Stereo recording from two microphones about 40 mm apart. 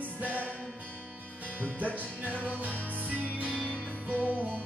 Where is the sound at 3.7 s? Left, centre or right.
Left.